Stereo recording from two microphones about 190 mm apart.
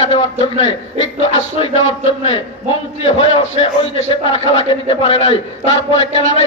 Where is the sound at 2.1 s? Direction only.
35° left (ahead or behind).